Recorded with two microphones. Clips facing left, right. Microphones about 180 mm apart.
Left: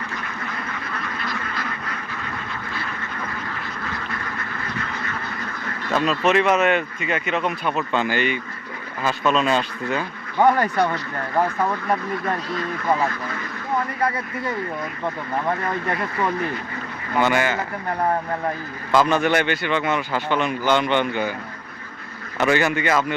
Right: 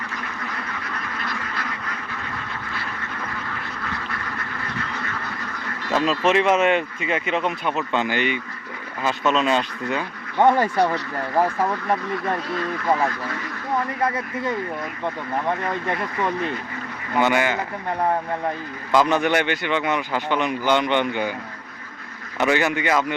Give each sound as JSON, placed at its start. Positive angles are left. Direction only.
{"t": 5.9, "sound": "speech", "side_deg": -25}
{"t": 11.3, "sound": "speech", "side_deg": 0}
{"t": 14.0, "sound": "speech", "side_deg": -20}
{"t": 17.2, "sound": "a man's voice", "side_deg": -15}
{"t": 18.9, "sound": "a man's voice", "side_deg": -15}
{"t": 22.4, "sound": "a man's voice", "side_deg": -15}